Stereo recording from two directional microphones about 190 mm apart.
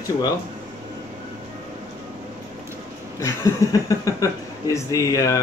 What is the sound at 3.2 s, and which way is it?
Speech, 15° left (ahead or behind).